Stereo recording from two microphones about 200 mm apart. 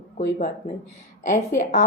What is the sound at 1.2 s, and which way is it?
Speech, 35° left (ahead or behind).